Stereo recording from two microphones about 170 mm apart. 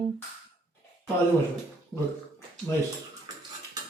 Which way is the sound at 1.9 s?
5° left (ahead or behind).